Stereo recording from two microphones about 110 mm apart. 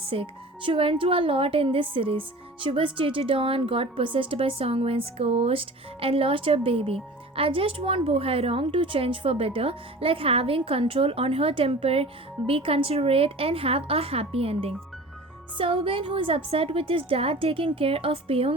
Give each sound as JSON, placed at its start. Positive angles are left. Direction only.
{"t": 0.0, "sound": "speech", "side_deg": -55}